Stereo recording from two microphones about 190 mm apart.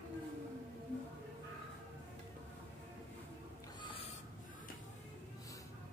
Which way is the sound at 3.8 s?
25° left (ahead or behind).